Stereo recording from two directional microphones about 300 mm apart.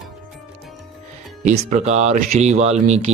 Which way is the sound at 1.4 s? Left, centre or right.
Right.